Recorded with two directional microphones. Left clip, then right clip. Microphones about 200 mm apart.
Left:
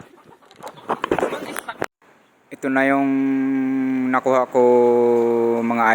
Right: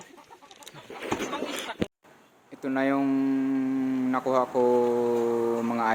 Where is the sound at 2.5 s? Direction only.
30° left (ahead or behind).